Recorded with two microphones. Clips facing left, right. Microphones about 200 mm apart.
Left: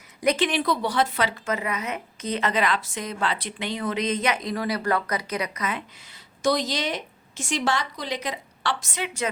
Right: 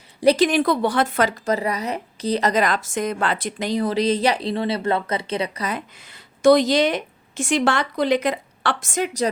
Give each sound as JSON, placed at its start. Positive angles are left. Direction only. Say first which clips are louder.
{"t": 0.2, "sound": "a woman's voice", "louder": "right 7 dB", "side_deg": -35}
{"t": 1.5, "sound": "a woman's voice", "louder": "right 5 dB", "side_deg": -35}
{"t": 6.1, "sound": "a woman's voice", "louder": "right 9 dB", "side_deg": -60}